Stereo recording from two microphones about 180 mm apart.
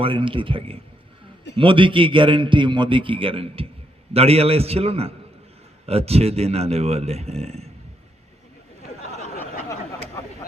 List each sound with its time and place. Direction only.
0.0 s a man's voice: 30° right (ahead or behind)